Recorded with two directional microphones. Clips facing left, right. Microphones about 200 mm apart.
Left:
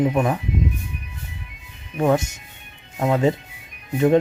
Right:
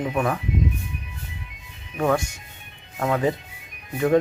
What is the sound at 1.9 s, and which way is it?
Speech, 20° left (ahead or behind).